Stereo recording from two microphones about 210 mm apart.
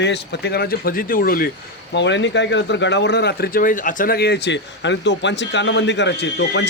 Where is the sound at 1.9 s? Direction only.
55° left (ahead or behind).